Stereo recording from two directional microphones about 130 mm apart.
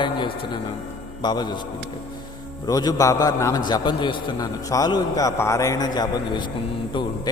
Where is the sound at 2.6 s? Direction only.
30° left (ahead or behind).